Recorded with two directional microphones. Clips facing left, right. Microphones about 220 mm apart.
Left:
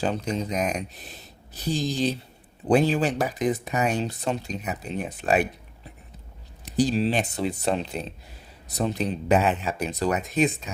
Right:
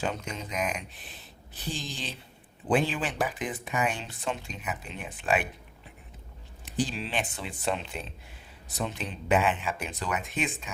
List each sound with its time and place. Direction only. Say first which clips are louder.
0.0 s speech: left 7 dB; 35° left (ahead or behind)
6.7 s speech: left 9 dB; 40° left (ahead or behind)